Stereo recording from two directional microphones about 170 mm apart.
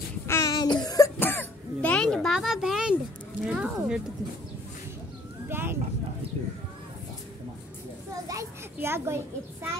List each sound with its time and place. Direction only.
0.3 s child singing: 20° left (ahead or behind)
0.8 s cough: 20° left (ahead or behind); by 4.0 s 5° right (ahead or behind)
5.5 s speech: 15° right (ahead or behind)
8.3 s a child's voice: 15° right (ahead or behind)